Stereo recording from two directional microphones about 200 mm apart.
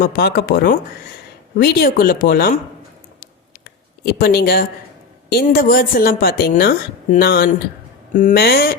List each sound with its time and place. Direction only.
0.0 s speech: 50° left (ahead or behind)
4.0 s speech: 50° left (ahead or behind)